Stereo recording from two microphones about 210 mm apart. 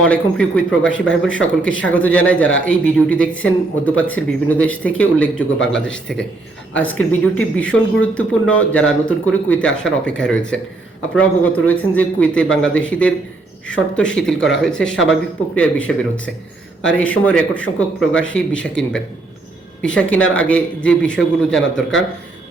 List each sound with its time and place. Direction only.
0.1 s speech: 5° left (ahead or behind)
20.2 s speech: 70° left (ahead or behind)
20.5 s speech: 5° left (ahead or behind)